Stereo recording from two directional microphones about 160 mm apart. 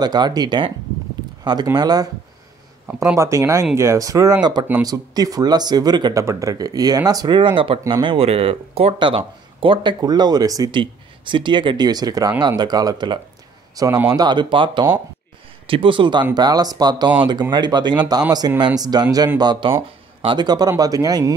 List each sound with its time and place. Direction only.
0.0 s speech: 25° right (ahead or behind)
2.9 s speech: 15° right (ahead or behind)